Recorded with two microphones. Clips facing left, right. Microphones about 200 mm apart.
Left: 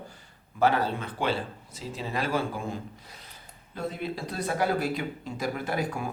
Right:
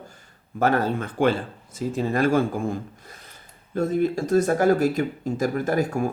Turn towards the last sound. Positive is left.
turn(degrees=-45)  # may be behind; listen again after turning